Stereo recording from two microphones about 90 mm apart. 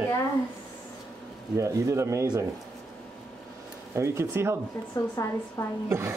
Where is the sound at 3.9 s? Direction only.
30° right (ahead or behind).